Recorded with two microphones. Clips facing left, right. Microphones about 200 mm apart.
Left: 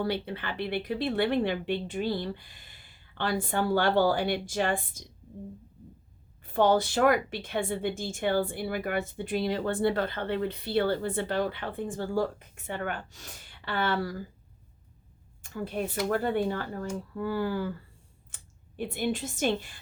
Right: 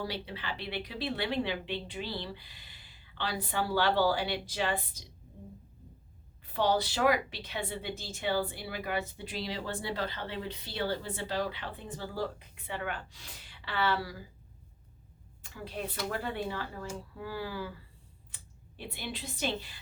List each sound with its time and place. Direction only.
0.0 s a woman's voice: 55° left (ahead or behind)
6.4 s a woman's voice: 50° left (ahead or behind)
15.5 s a woman's voice: 50° left (ahead or behind)
18.8 s a woman's voice: 50° left (ahead or behind)